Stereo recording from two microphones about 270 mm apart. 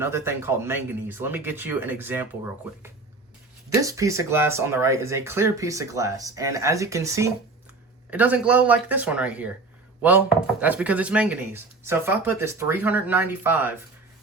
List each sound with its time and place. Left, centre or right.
0.0 s speech: centre